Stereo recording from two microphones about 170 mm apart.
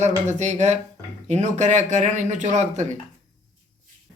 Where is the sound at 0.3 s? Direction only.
40° right (ahead or behind).